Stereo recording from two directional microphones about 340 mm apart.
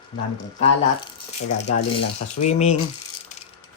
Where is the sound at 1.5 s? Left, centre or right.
Centre.